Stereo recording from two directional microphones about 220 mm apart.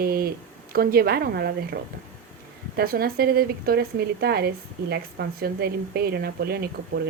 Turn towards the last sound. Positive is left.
turn(degrees=-45)  # may be behind; listen again after turning